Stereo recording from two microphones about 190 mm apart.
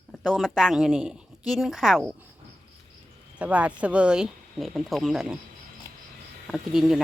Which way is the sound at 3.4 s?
5° right (ahead or behind).